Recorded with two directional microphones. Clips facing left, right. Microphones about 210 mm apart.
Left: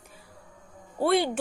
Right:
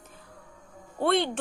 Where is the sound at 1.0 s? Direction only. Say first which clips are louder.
Left 1 dB; 5° left (ahead or behind).